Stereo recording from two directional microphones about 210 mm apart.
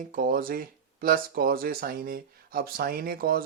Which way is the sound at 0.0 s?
40° right (ahead or behind).